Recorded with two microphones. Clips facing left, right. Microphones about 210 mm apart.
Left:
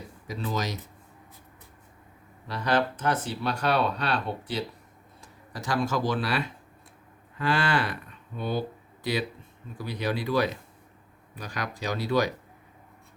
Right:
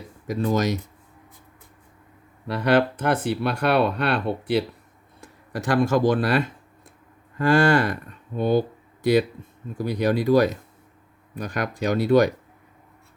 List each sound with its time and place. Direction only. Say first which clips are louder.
0.3 s speech: right 9 dB; 50° right (ahead or behind)
2.5 s speech: right 6 dB; 60° right (ahead or behind)
9.7 s speech: right 8 dB; 45° right (ahead or behind)